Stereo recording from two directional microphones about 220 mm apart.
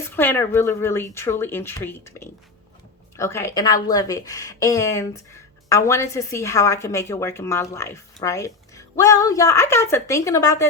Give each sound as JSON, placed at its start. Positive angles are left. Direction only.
{"t": 0.0, "sound": "a woman's voice", "side_deg": 10}